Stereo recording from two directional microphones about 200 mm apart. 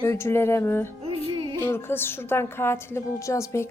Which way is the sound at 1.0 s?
30° right (ahead or behind).